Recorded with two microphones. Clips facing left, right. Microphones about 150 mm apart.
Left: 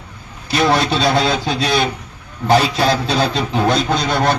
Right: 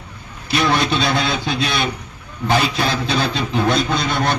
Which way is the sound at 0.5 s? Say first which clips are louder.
Left 2 dB; 35° left (ahead or behind).